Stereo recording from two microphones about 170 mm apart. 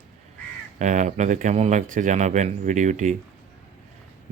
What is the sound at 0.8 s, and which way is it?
Speech, 45° right (ahead or behind).